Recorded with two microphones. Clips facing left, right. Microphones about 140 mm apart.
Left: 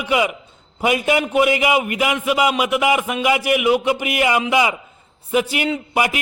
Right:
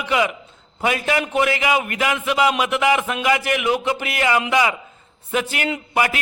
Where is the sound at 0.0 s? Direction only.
10° left (ahead or behind).